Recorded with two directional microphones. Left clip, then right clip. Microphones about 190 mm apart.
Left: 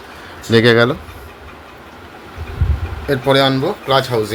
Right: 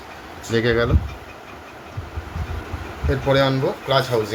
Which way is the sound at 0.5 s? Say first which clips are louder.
Left 8 dB; 50° left (ahead or behind).